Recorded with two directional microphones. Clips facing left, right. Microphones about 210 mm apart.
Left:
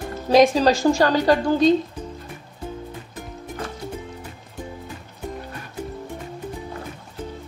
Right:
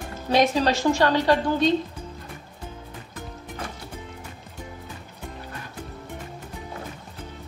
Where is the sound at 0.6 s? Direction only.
40° left (ahead or behind).